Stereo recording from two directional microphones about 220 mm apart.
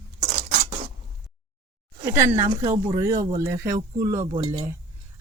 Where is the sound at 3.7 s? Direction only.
15° right (ahead or behind).